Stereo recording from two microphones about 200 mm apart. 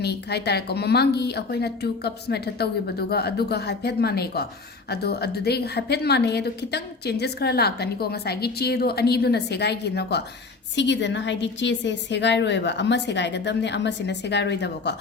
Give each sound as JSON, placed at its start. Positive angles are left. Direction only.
{"t": 0.0, "sound": "a woman's voice", "side_deg": 55}